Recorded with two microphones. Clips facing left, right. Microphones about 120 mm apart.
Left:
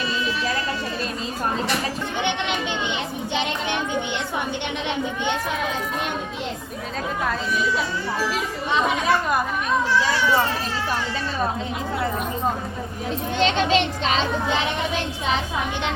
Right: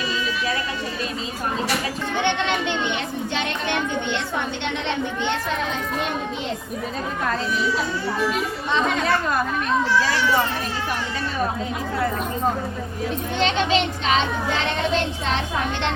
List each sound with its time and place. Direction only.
8.7 s speech: 10° left (ahead or behind)
13.4 s a child's voice: 40° left (ahead or behind)
14.4 s speech: 15° left (ahead or behind)